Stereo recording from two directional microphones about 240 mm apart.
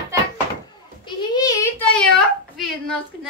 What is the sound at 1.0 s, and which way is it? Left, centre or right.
Speech, centre.